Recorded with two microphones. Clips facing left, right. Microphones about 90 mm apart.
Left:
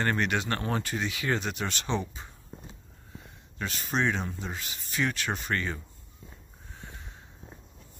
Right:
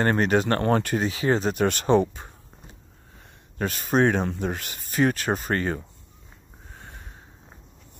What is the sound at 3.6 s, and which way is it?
Speech, 50° right (ahead or behind).